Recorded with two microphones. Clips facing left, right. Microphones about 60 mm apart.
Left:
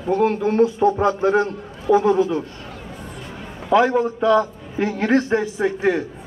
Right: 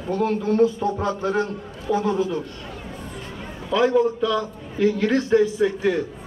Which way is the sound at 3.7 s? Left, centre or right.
Left.